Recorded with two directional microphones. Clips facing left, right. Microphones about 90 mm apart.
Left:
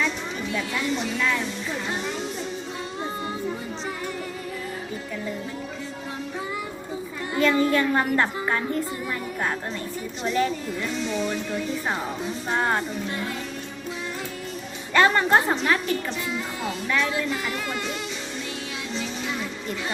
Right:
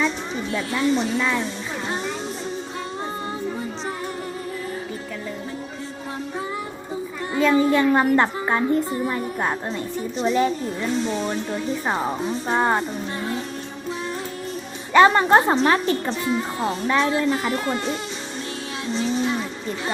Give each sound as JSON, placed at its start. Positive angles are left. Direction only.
{"t": 0.5, "sound": "music", "side_deg": -30}
{"t": 7.3, "sound": "music", "side_deg": -15}
{"t": 11.0, "sound": "a woman's voice", "side_deg": -35}
{"t": 12.5, "sound": "music", "side_deg": -20}
{"t": 14.9, "sound": "a woman's voice", "side_deg": -20}
{"t": 18.9, "sound": "music", "side_deg": -30}